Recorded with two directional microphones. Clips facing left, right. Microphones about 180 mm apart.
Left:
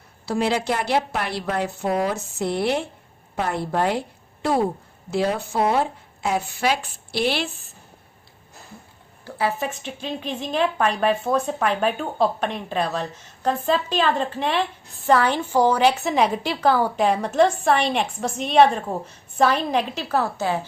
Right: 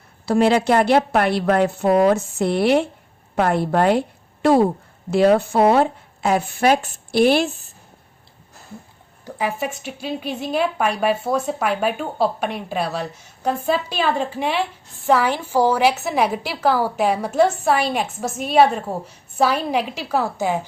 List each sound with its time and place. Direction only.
0.3 s a woman's voice: 60° right (ahead or behind)
5.1 s a woman's voice: 65° right (ahead or behind); by 7.5 s 45° right (ahead or behind)
9.2 s speech: 15° right (ahead or behind)